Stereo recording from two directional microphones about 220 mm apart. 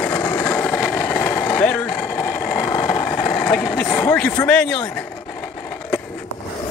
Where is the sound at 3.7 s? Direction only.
5° left (ahead or behind).